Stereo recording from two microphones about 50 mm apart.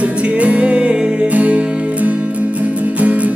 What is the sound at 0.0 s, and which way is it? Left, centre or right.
Music, right.